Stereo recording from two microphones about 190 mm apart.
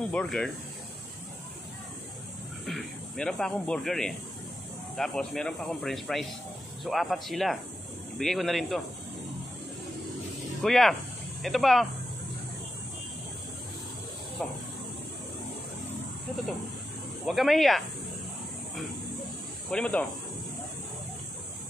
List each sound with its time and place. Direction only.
0.1 s speech: 5° left (ahead or behind)
2.6 s speech: 5° left (ahead or behind)
10.6 s speech: centre (ahead or behind)
14.4 s speech: centre (ahead or behind)
17.3 s speech: centre (ahead or behind)
19.7 s speech: 5° left (ahead or behind)